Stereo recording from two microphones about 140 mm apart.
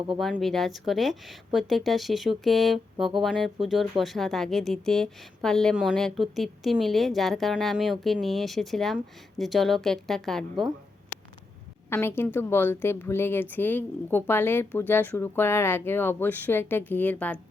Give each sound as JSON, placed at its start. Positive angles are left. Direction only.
{"t": 0.2, "sound": "a woman's voice", "side_deg": 0}
{"t": 11.9, "sound": "a woman's voice", "side_deg": 15}